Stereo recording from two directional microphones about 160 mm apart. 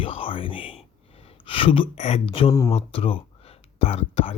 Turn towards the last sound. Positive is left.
turn(degrees=40)  # may be behind; listen again after turning